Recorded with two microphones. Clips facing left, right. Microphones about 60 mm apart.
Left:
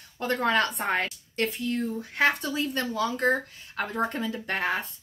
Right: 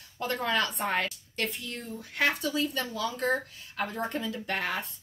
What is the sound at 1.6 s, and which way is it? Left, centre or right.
Speech, left.